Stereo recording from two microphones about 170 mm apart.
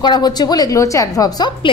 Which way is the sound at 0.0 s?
25° left (ahead or behind).